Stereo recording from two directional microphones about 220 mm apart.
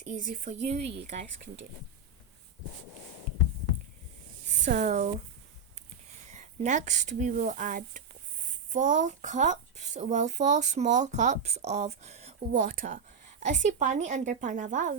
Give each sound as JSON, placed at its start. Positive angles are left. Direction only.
{"t": 0.0, "sound": "speech", "side_deg": -35}
{"t": 4.7, "sound": "speech", "side_deg": -30}
{"t": 6.3, "sound": "speech", "side_deg": -30}